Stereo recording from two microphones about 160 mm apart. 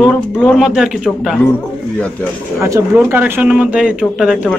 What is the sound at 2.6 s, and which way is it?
Speech, 15° right (ahead or behind).